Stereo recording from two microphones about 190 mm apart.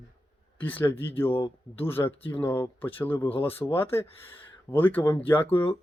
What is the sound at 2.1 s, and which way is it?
Speech, 30° left (ahead or behind).